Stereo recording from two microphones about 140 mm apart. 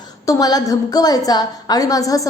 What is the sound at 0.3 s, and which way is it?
A woman's voice, 25° left (ahead or behind).